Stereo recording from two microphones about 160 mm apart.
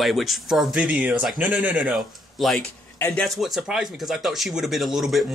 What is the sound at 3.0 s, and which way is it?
Speech, 15° left (ahead or behind).